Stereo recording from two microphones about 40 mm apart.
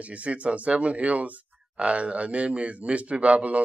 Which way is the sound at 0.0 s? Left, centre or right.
Right.